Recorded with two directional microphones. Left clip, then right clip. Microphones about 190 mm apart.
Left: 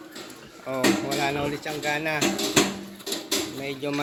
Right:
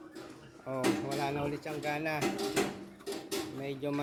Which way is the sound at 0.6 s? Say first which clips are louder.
Left 8 dB; 5° right (ahead or behind).